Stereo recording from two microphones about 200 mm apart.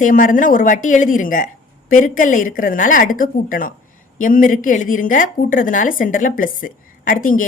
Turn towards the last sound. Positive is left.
turn(degrees=40)  # may be behind; listen again after turning